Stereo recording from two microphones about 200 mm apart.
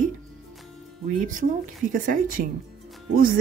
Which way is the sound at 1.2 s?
40° right (ahead or behind).